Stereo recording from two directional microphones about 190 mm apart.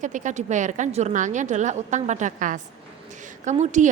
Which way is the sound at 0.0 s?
40° right (ahead or behind).